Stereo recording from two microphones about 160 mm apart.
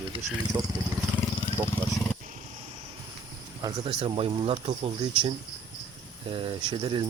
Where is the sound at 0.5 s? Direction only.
10° right (ahead or behind).